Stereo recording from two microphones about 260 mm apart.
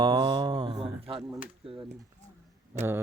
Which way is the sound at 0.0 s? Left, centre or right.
Centre.